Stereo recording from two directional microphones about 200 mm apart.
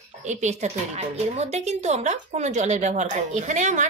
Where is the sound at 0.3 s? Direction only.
35° right (ahead or behind).